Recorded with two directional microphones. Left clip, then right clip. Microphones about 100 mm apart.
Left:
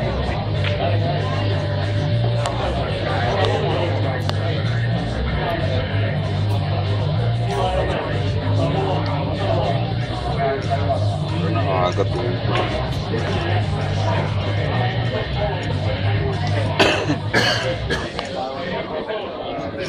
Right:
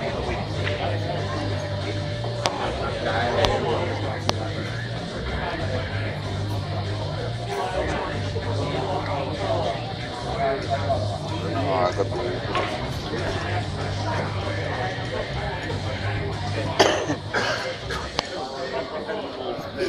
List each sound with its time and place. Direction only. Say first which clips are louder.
16.7 s cough: left 2 dB; 30° right (ahead or behind)